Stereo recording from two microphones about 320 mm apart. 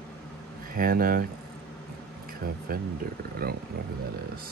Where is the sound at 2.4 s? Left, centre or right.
Right.